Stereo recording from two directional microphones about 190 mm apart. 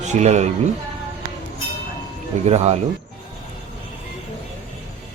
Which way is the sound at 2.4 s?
35° right (ahead or behind).